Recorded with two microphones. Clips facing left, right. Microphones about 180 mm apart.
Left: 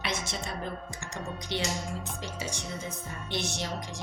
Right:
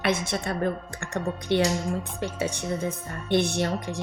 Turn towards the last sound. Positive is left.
turn(degrees=-55)  # may be behind; listen again after turning